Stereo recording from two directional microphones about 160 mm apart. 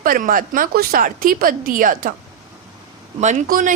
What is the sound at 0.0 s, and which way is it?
Speech, 60° right (ahead or behind).